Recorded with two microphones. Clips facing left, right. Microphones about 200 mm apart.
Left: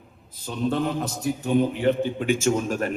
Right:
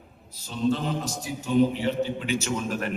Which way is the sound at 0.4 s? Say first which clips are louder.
Left 1 dB; 60° left (ahead or behind).